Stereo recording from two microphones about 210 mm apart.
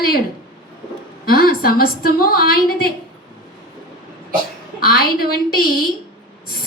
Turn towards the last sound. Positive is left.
turn(degrees=45)  # may be behind; listen again after turning